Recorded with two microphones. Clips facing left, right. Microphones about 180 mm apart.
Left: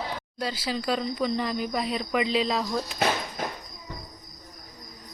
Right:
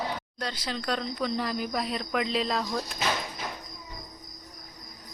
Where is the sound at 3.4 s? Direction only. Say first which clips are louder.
Left 5 dB; 50° left (ahead or behind).